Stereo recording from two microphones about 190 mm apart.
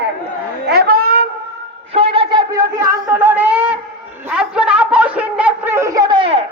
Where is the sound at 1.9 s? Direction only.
30° right (ahead or behind).